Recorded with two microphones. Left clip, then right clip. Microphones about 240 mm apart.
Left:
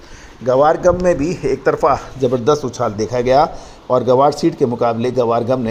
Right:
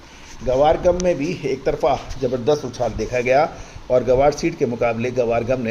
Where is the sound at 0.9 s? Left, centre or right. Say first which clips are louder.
Left 4 dB; centre.